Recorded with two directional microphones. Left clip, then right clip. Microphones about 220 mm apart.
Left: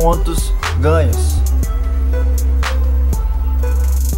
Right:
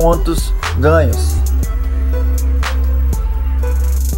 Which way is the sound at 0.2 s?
10° right (ahead or behind).